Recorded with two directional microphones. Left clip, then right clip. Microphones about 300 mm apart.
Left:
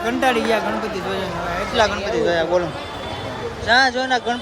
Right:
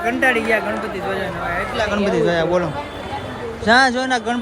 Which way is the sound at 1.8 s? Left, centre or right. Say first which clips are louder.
Left 4 dB; left.